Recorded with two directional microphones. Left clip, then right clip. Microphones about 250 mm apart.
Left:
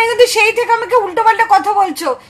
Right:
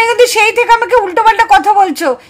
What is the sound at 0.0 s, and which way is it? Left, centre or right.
Speech, right.